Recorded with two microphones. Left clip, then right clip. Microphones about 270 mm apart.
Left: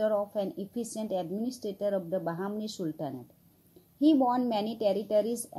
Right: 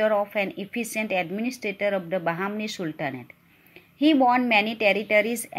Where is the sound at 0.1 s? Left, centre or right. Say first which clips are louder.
Right 6 dB; right.